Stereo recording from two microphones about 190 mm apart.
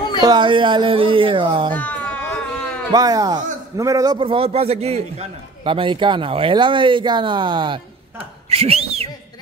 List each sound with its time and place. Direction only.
0.2 s speech: 25° right (ahead or behind)
1.8 s a sound: 10° left (ahead or behind)
2.9 s speech: 20° right (ahead or behind)